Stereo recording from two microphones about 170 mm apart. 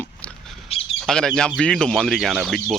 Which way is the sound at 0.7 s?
35° left (ahead or behind).